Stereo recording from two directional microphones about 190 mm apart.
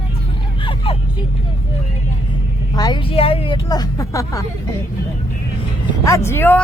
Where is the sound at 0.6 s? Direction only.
25° left (ahead or behind).